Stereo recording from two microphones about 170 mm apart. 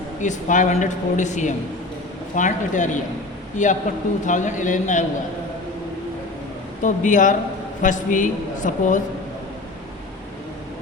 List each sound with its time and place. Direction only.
0.2 s speech: 45° left (ahead or behind)
6.8 s speech: 50° left (ahead or behind)